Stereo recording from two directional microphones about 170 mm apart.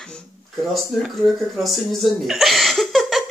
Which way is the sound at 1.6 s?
Centre (ahead or behind).